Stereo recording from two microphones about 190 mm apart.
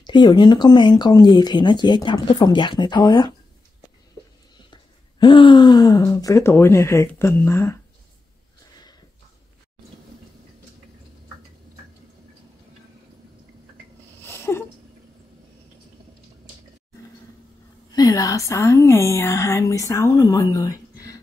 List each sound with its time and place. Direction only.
0.0 s speech: 25° left (ahead or behind)
5.2 s a woman's voice: 25° left (ahead or behind)
14.2 s a sound: 15° left (ahead or behind)
17.9 s a woman's voice: 20° left (ahead or behind)